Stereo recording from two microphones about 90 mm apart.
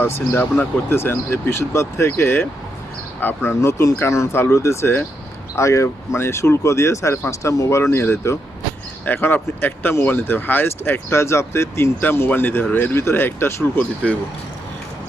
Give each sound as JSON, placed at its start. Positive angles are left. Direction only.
{"t": 0.0, "sound": "speech", "side_deg": 25}